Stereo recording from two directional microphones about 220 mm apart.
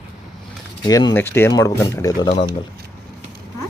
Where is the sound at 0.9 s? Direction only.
15° left (ahead or behind).